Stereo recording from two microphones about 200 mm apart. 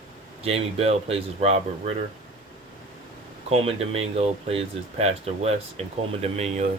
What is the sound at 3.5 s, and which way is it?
Speech, 30° right (ahead or behind).